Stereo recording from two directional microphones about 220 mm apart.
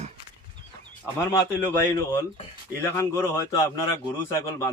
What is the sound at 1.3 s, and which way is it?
Speech, 15° left (ahead or behind).